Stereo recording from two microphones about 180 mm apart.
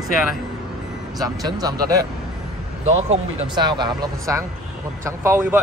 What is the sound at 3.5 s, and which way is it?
Speech, 25° right (ahead or behind).